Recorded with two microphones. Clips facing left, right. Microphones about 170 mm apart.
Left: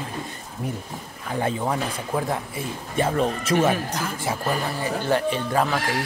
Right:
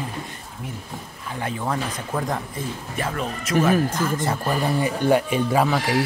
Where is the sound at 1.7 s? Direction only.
10° left (ahead or behind).